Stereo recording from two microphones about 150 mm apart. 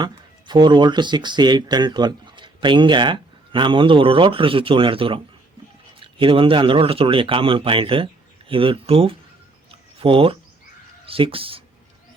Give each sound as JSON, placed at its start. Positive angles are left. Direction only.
{"t": 0.0, "sound": "speech", "side_deg": -30}